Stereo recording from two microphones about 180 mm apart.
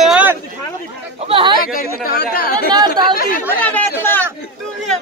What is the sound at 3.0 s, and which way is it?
Speech, 20° right (ahead or behind).